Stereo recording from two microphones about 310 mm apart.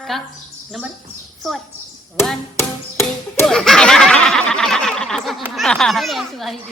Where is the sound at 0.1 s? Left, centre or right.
Centre.